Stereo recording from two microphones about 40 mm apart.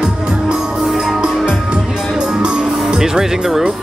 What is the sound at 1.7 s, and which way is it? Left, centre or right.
Music, right.